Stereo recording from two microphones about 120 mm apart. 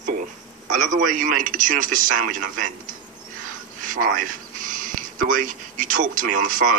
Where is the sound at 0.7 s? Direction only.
90° right.